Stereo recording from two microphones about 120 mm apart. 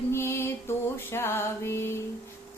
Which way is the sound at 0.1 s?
20° left (ahead or behind).